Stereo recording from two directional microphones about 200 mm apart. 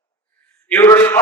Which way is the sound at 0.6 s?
10° left (ahead or behind).